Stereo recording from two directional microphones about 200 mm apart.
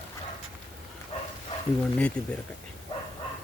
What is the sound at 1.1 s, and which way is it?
Bow-wow, 30° left (ahead or behind).